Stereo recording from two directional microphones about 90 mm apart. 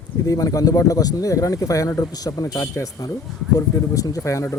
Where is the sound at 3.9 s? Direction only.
35° left (ahead or behind).